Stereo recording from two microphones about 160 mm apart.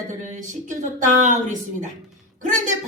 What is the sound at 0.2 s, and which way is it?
Speech, 50° right (ahead or behind).